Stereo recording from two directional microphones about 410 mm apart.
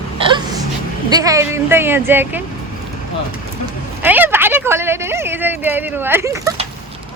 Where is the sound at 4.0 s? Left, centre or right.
Centre.